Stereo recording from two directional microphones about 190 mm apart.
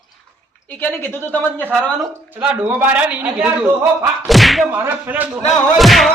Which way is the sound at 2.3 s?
5° right (ahead or behind).